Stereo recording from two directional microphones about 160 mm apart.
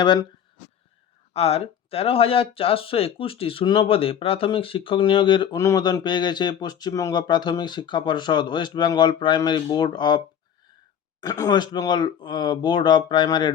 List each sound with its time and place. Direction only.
0.0 s speech: 30° left (ahead or behind)
1.3 s speech: 40° left (ahead or behind)
11.2 s speech: 20° left (ahead or behind)